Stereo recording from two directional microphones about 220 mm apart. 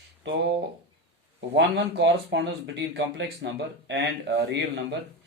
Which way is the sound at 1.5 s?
55° right (ahead or behind).